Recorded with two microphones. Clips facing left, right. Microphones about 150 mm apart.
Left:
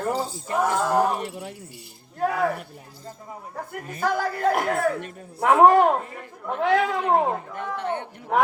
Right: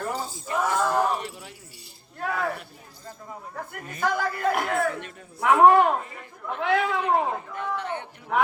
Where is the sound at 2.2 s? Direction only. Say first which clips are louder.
Left 5 dB; 40° left (ahead or behind).